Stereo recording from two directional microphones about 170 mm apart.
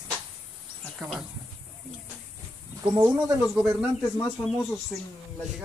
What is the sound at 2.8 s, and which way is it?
Speech, 25° right (ahead or behind).